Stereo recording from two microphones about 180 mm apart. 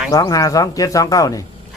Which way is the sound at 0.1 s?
20° left (ahead or behind).